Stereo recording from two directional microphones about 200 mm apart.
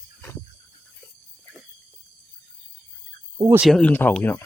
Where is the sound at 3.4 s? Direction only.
15° right (ahead or behind).